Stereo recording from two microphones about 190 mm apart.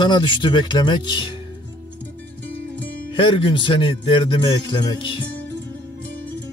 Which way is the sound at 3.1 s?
25° left (ahead or behind).